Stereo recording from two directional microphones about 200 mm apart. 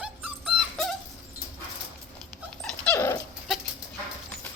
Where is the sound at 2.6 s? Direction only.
5° left (ahead or behind).